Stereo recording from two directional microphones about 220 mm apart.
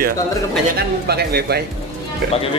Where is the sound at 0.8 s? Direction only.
45° right (ahead or behind).